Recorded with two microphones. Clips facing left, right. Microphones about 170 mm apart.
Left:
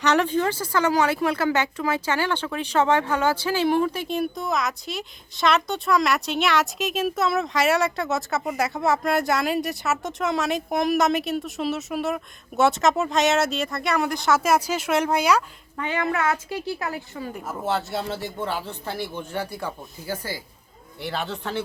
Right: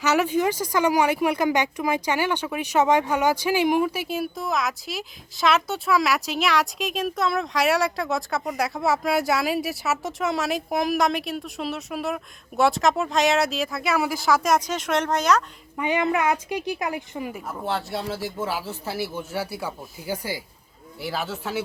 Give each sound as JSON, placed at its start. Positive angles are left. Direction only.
{"t": 0.0, "sound": "speech", "side_deg": -5}
{"t": 15.8, "sound": "speech", "side_deg": -15}
{"t": 17.3, "sound": "speech", "side_deg": 5}